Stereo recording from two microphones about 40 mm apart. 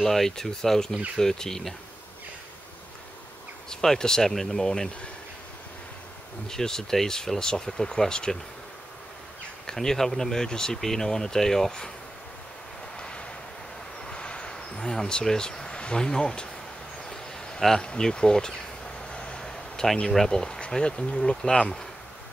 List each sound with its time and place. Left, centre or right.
0.0 s speech: centre
3.7 s speech: centre
6.4 s speech: centre
9.7 s speech: centre
12.9 s vehicle: left
14.8 s speech: centre
17.1 s a sound: centre
17.6 s speech: centre
19.0 s a sound: left
20.2 s speech: centre